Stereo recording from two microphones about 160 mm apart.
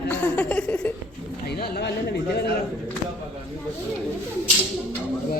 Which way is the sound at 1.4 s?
85° left.